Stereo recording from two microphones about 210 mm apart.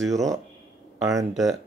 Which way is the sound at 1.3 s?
Centre (ahead or behind).